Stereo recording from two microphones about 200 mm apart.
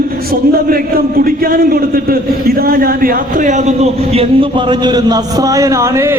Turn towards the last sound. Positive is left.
turn(degrees=-15)  # may be behind; listen again after turning